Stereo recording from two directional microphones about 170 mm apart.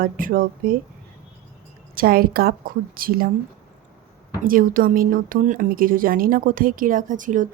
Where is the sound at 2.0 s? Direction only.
60° right (ahead or behind).